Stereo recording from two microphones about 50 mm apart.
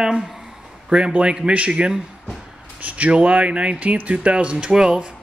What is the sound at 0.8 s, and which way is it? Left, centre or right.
Speech, centre.